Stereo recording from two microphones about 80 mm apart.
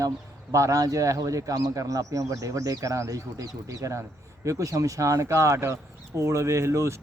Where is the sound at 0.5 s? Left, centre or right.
Right.